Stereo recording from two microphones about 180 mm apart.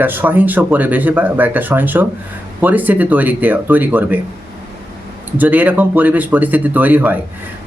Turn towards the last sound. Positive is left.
turn(degrees=-10)  # may be behind; listen again after turning